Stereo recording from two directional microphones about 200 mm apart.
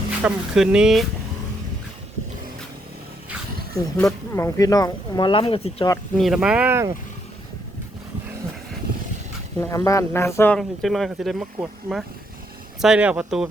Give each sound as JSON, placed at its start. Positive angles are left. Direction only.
{"t": 0.2, "sound": "speech", "side_deg": -5}
{"t": 3.9, "sound": "speech", "side_deg": 10}
{"t": 6.1, "sound": "speech", "side_deg": 0}
{"t": 9.6, "sound": "speech", "side_deg": 15}